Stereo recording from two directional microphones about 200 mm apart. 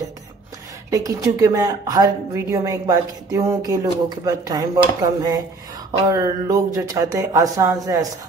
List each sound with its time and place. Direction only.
0.8 s speech: 15° right (ahead or behind)